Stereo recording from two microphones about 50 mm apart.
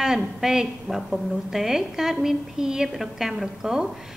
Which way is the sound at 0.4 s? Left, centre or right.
Centre.